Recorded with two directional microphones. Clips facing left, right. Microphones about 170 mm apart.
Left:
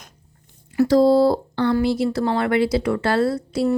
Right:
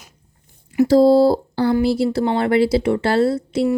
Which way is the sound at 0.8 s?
30° right (ahead or behind).